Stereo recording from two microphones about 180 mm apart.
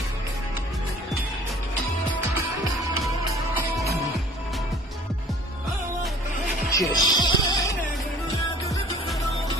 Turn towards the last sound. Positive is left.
turn(degrees=25)  # may be behind; listen again after turning